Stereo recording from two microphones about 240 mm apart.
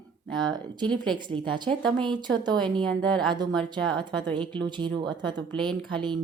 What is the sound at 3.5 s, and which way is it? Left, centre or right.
Speech, centre.